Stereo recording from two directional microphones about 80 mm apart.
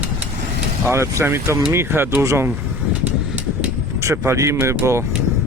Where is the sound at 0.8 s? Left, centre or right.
Right.